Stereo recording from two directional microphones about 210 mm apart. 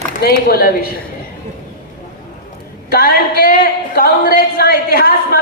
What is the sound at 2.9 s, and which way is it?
A woman's voice, 45° left (ahead or behind).